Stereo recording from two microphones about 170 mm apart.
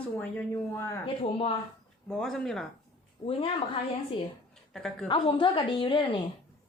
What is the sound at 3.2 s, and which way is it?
Speech, 35° left (ahead or behind).